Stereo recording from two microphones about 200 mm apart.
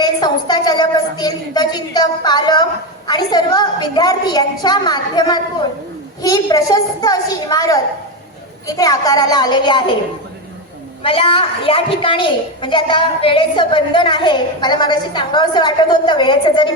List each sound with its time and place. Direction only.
0.0 s a woman's voice: 20° left (ahead or behind)
11.0 s a woman's voice: 30° left (ahead or behind)